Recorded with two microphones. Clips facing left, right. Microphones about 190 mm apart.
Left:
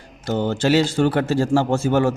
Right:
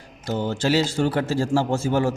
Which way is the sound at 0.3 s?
65° left (ahead or behind).